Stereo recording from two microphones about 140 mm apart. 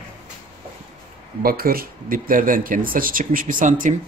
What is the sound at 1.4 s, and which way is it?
A man's voice, 90° right.